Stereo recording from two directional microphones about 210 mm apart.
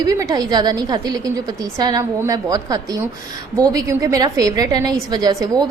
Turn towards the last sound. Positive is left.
turn(degrees=-20)  # may be behind; listen again after turning